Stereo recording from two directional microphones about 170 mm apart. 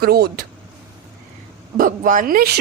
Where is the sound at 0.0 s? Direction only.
65° right (ahead or behind).